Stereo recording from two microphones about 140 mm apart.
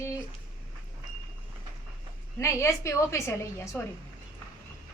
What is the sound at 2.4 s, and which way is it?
A woman's voice, 20° left (ahead or behind).